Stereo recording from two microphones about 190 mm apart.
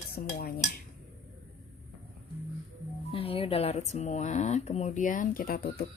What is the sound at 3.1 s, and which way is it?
Speech, 30° left (ahead or behind).